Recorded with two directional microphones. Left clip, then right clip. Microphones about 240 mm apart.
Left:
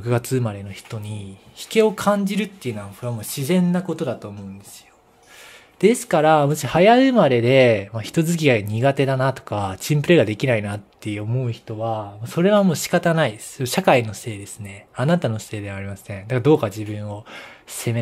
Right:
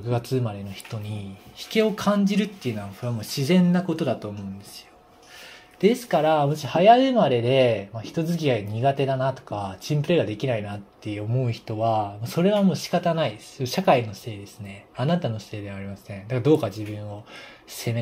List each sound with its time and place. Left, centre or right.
0.0 s speech: left; by 4.3 s centre
5.8 s speech: left
11.4 s speech: centre
12.4 s speech: left